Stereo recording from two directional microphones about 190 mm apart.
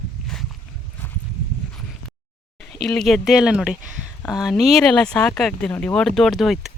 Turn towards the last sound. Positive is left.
turn(degrees=0)  # may be behind; listen again after turning